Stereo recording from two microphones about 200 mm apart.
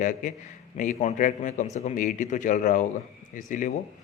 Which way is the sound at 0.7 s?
40° left (ahead or behind).